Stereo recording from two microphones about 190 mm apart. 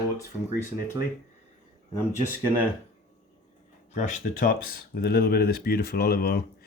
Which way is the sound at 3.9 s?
40° left (ahead or behind).